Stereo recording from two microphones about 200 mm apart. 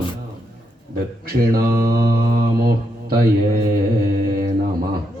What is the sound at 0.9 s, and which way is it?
Mantra, 50° right (ahead or behind).